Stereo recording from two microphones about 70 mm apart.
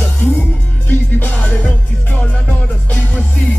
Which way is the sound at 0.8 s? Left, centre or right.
Left.